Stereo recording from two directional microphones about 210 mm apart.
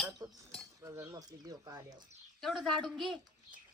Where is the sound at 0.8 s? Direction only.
15° right (ahead or behind).